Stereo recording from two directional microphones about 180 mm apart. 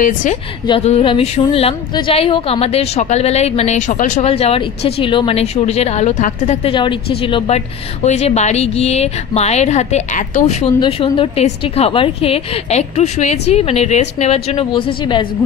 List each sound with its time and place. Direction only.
0.0 s a woman's voice: 45° left (ahead or behind)
0.7 s a woman's voice: 35° left (ahead or behind)
10.8 s a woman's voice: 30° left (ahead or behind)